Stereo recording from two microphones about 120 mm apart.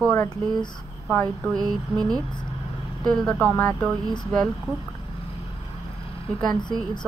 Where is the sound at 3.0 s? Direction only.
5° left (ahead or behind).